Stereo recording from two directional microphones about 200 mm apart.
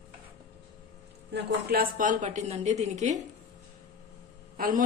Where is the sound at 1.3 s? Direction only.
50° right (ahead or behind).